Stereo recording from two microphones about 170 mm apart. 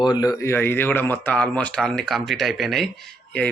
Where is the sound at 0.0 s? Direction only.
25° left (ahead or behind).